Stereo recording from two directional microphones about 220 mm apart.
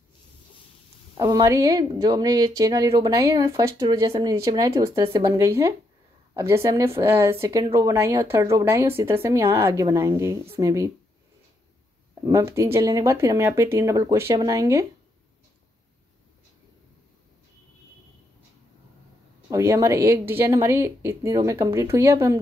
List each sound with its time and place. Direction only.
1.1 s speech: 15° right (ahead or behind)
12.3 s speech: 15° right (ahead or behind)
19.5 s speech: 15° right (ahead or behind)